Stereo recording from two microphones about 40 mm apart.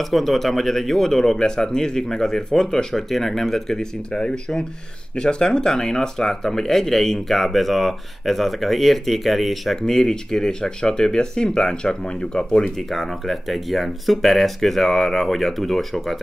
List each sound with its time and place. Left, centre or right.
0.0 s speech: centre
9.8 s speech: centre
12.6 s speech: centre